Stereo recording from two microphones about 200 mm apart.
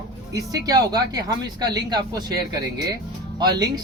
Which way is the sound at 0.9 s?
20° right (ahead or behind).